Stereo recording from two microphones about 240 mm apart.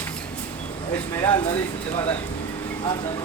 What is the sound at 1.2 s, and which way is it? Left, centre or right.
Speech, centre.